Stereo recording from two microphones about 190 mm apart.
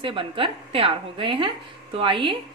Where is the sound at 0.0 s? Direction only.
25° right (ahead or behind).